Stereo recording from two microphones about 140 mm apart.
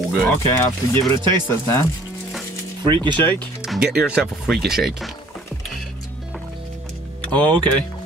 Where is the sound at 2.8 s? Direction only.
35° right (ahead or behind).